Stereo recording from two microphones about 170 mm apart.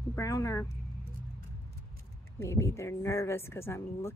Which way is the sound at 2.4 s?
15° left (ahead or behind).